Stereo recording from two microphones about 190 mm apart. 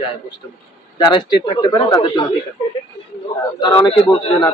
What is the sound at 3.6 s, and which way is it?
Speech, 15° left (ahead or behind).